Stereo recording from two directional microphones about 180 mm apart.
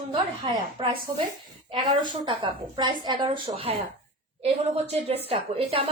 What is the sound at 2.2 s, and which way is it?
A woman's voice, 25° right (ahead or behind).